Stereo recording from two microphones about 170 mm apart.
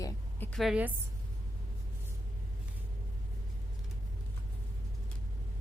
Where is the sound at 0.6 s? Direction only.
5° right (ahead or behind).